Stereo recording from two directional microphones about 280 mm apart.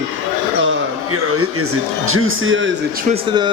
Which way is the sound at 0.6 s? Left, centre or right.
Right.